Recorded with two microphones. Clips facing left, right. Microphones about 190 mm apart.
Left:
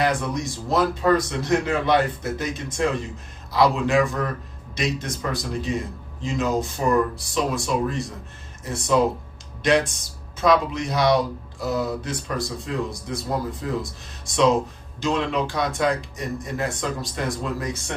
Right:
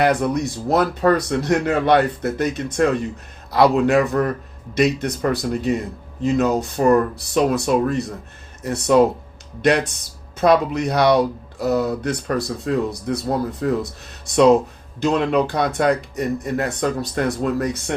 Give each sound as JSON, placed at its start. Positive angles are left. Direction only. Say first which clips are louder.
{"t": 0.0, "sound": "speech", "louder": "right 5 dB", "side_deg": -65}